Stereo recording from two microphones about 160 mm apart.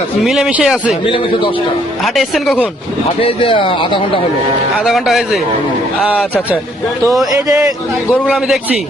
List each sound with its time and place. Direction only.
0.3 s speech: 5° right (ahead or behind)
1.0 s a man's voice: 35° left (ahead or behind)
2.1 s speech: centre (ahead or behind)
3.2 s a man's voice: 35° left (ahead or behind)
4.8 s a man's voice: centre (ahead or behind); by 7.7 s 20° right (ahead or behind)